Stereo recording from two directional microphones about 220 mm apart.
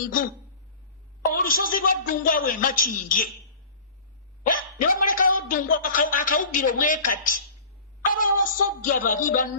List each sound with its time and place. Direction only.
1.2 s a man's voice: 40° left (ahead or behind)
4.4 s a man's voice: 40° left (ahead or behind)